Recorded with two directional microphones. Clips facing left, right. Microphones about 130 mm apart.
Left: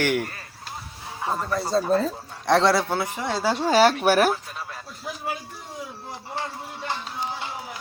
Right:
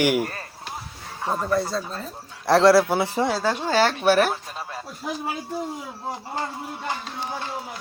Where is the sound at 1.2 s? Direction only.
5° right (ahead or behind).